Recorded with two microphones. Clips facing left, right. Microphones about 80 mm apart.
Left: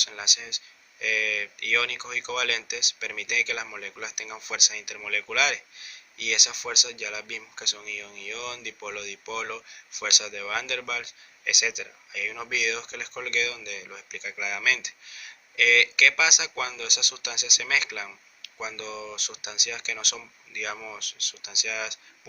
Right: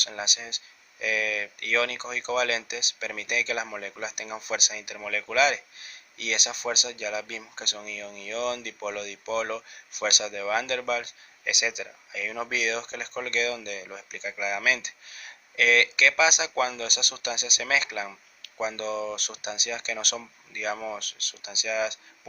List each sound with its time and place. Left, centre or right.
0.0 s speech: right